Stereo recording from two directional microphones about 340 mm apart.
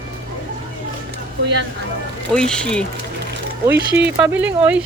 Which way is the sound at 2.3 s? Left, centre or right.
Centre.